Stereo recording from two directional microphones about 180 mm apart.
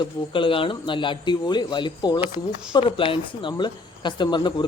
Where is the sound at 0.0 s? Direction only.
30° left (ahead or behind).